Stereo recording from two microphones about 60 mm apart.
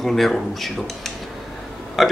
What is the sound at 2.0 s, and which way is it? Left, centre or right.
Speech, centre.